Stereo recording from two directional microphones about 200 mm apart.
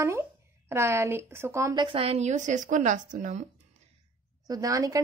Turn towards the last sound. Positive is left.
turn(degrees=-15)  # may be behind; listen again after turning